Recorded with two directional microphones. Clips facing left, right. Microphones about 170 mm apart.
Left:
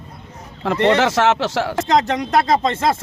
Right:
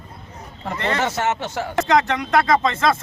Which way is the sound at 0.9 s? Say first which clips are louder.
Left 6 dB; 85° left.